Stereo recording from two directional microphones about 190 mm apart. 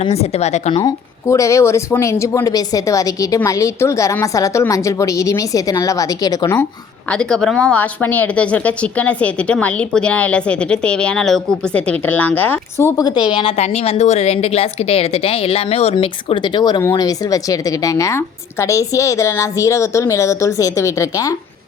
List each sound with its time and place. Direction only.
0.0 s a woman's voice: 35° left (ahead or behind)
0.9 s speech: 15° left (ahead or behind)
7.1 s speech: 5° left (ahead or behind)
13.3 s a woman's voice: 30° left (ahead or behind)